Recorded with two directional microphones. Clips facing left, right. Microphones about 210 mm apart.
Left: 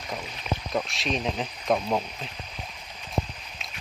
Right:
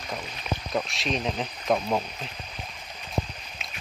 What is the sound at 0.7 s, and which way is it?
Speech, centre (ahead or behind).